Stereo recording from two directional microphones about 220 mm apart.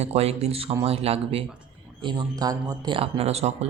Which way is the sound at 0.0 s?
25° right (ahead or behind).